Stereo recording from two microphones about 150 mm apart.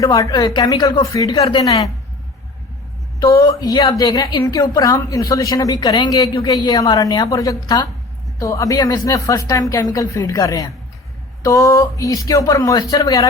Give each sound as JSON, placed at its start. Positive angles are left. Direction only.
{"t": 0.0, "sound": "a woman's voice", "side_deg": 20}
{"t": 3.2, "sound": "a woman's voice", "side_deg": 25}